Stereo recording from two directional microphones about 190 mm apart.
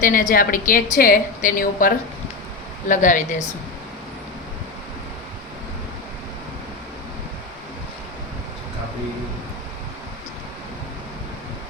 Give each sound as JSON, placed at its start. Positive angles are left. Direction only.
{"t": 0.0, "sound": "a woman's voice", "side_deg": 45}